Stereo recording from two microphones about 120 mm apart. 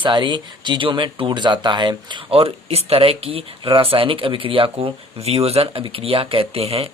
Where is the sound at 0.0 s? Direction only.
40° right (ahead or behind).